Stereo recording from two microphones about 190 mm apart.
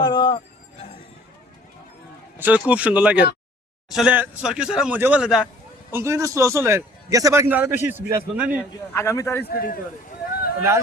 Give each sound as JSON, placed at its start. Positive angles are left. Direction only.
{"t": 0.0, "sound": "music", "side_deg": 25}
{"t": 2.4, "sound": "a man's voice", "side_deg": -5}
{"t": 8.9, "sound": "a man's voice", "side_deg": 15}
{"t": 9.5, "sound": "speech", "side_deg": 50}